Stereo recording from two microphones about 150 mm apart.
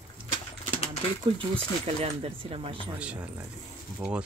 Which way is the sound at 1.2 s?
35° right (ahead or behind).